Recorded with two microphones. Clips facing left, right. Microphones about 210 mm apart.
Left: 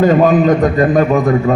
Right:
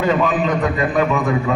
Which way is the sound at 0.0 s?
45° left (ahead or behind).